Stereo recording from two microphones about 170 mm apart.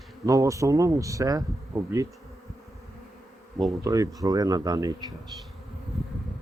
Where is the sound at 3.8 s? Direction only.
20° right (ahead or behind).